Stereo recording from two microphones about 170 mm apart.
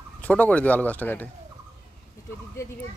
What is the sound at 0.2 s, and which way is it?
Speech, 10° left (ahead or behind).